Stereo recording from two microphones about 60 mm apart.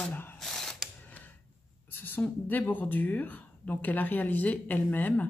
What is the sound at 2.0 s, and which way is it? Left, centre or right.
Speech, left.